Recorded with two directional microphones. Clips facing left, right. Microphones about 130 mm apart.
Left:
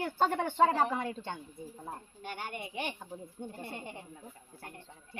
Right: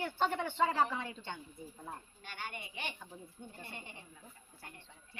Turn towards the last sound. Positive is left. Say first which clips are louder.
# left 8 dB
turn(degrees=60)  # may be behind; listen again after turning